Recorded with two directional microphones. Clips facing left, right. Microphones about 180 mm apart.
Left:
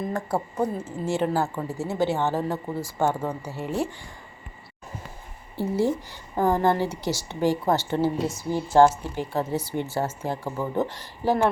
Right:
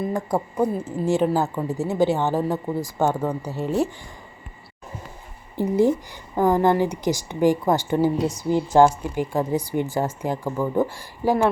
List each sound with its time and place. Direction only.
0.1 s a woman's voice: 15° right (ahead or behind)
5.5 s a woman's voice: 15° right (ahead or behind)